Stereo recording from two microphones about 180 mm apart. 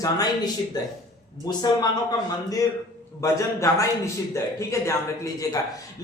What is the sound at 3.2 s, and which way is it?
A man's voice, 15° left (ahead or behind).